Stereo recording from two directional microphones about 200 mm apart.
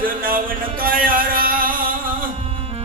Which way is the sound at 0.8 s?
45° right (ahead or behind).